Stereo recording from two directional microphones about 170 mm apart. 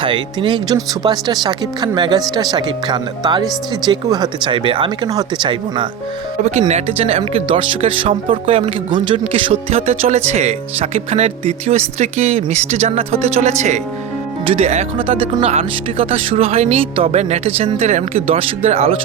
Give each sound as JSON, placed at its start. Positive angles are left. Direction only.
{"t": 0.0, "sound": "speech", "side_deg": -30}
{"t": 6.4, "sound": "speech", "side_deg": -40}